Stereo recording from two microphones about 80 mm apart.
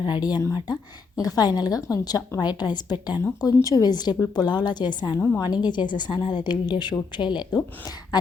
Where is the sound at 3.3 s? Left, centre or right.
Left.